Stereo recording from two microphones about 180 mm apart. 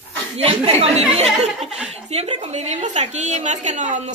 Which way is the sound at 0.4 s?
35° right (ahead or behind).